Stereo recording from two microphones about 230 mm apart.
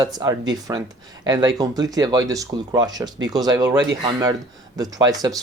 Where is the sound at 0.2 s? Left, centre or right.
Centre.